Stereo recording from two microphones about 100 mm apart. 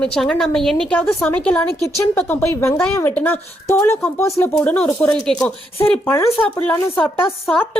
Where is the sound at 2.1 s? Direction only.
20° left (ahead or behind).